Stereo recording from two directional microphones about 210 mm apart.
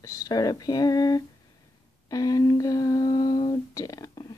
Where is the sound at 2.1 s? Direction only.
15° left (ahead or behind).